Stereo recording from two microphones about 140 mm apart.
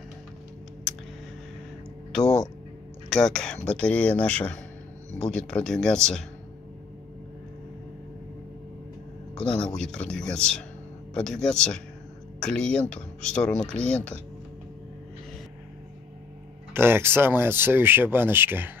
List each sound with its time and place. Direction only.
2.1 s speech: 5° left (ahead or behind)
9.8 s speech: 5° left (ahead or behind)
16.7 s speech: 15° right (ahead or behind)